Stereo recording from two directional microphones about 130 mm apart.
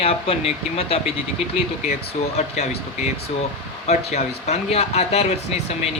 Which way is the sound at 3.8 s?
60° left (ahead or behind).